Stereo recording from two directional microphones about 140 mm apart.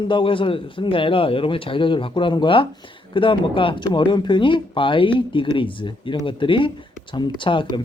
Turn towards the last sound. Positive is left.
turn(degrees=35)  # may be behind; listen again after turning